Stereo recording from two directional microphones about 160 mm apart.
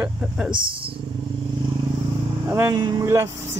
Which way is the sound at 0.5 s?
35° right (ahead or behind).